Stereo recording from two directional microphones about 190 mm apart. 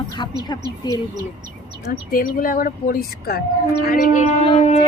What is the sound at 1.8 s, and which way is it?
Speech, 50° left (ahead or behind).